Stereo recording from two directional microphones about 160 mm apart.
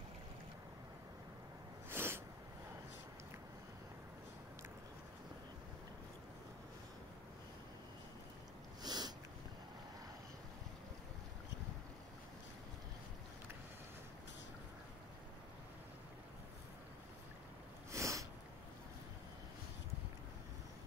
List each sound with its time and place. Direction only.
1.9 s sneeze: 15° right (ahead or behind)
8.8 s a sound: 25° right (ahead or behind)
17.9 s sneeze: 20° right (ahead or behind)